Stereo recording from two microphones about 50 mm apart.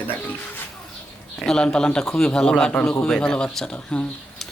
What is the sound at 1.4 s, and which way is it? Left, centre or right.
Speech, centre.